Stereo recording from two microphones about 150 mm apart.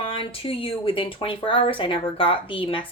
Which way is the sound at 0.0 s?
35° left (ahead or behind).